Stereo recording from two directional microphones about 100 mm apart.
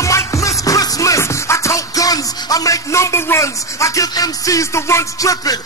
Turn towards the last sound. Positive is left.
turn(degrees=30)  # may be behind; listen again after turning